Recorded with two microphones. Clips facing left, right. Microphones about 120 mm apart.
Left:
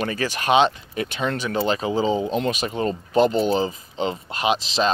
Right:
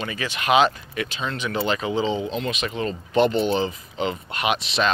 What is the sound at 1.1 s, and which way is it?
Speech, 55° left (ahead or behind).